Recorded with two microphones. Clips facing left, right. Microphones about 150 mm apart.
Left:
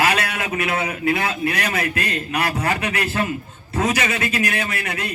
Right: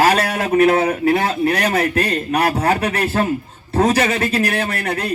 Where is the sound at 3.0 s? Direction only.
50° right (ahead or behind).